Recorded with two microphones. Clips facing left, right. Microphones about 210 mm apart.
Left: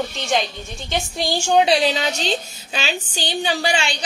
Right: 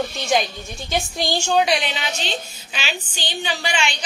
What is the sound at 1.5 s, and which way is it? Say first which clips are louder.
A woman's voice: left 5 dB; 30° left (ahead or behind).